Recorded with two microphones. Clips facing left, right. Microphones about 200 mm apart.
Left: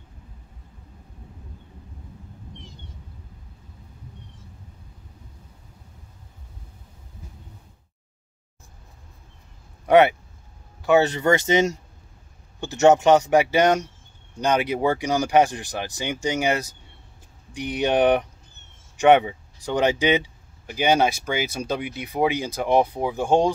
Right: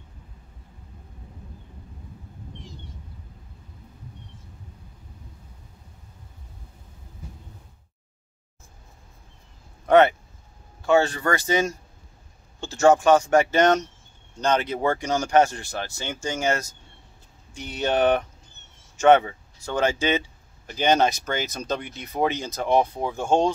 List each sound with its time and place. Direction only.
9.8 s a man's voice: 15° left (ahead or behind)